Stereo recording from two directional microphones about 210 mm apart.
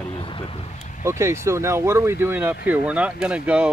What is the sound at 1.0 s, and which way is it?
Speech, 15° right (ahead or behind).